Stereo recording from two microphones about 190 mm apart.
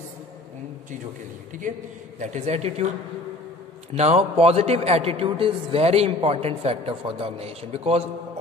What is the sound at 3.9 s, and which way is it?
A man's voice, 35° right (ahead or behind).